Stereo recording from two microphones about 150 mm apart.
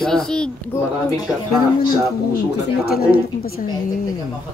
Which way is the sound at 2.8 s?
90° left.